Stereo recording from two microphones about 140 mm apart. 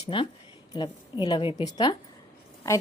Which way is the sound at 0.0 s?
40° left (ahead or behind).